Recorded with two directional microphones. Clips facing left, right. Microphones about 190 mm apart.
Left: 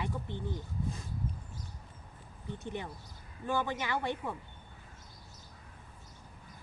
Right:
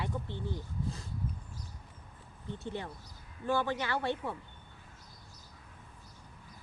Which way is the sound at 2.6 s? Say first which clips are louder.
Right 1 dB; 15° left (ahead or behind).